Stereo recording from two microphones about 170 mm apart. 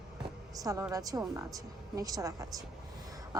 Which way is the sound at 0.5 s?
20° right (ahead or behind).